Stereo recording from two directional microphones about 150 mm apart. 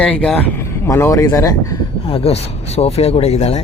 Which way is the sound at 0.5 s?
20° left (ahead or behind).